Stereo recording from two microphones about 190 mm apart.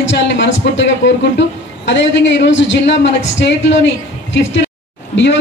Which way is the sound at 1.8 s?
70° left (ahead or behind).